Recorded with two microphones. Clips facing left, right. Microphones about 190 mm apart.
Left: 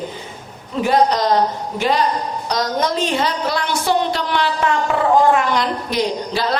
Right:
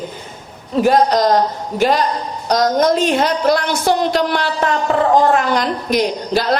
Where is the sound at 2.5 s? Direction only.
45° right (ahead or behind).